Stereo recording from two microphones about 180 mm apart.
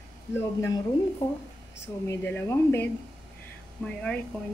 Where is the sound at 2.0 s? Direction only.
10° left (ahead or behind).